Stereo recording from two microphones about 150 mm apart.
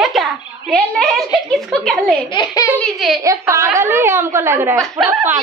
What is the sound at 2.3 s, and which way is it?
Speech, 30° left (ahead or behind).